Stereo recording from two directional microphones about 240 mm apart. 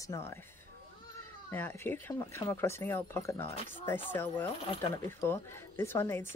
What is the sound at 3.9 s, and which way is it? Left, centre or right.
Speech, centre.